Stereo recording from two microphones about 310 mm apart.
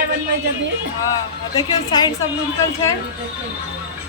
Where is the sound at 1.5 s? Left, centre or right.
Centre.